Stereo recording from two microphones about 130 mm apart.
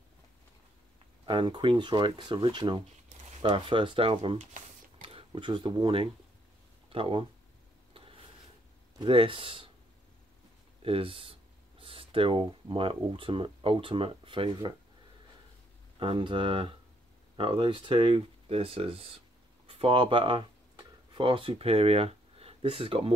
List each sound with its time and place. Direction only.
1.2 s speech: 40° right (ahead or behind)
7.9 s a sound: 45° right (ahead or behind)
8.9 s speech: 40° right (ahead or behind)
10.8 s speech: 45° right (ahead or behind)
16.0 s speech: 40° right (ahead or behind)